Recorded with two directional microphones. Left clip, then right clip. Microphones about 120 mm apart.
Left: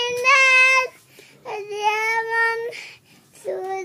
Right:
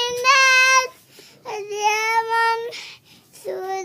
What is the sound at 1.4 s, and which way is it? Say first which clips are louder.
Child singing: right 1 dB; 25° right (ahead or behind).